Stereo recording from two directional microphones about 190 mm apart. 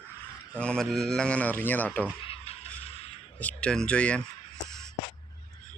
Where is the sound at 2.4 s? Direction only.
30° left (ahead or behind).